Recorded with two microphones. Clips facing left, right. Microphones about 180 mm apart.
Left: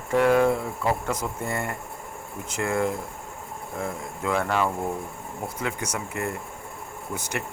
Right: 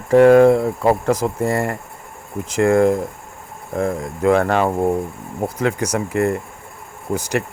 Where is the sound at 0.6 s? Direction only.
40° right (ahead or behind).